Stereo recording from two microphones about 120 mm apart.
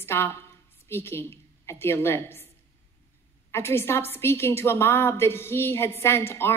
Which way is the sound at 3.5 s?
20° left (ahead or behind).